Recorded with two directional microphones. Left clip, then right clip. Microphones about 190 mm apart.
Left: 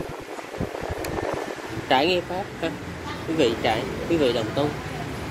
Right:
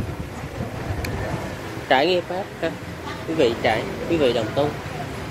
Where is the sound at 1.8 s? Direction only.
25° left (ahead or behind).